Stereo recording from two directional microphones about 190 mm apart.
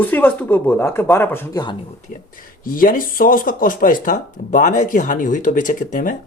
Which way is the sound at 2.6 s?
50° left (ahead or behind).